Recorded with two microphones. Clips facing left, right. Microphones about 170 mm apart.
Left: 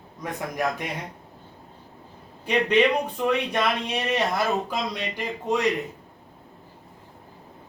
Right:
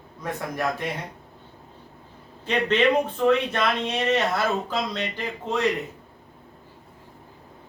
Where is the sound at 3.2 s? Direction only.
10° left (ahead or behind).